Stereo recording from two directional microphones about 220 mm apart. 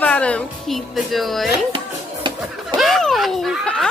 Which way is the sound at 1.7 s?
20° right (ahead or behind).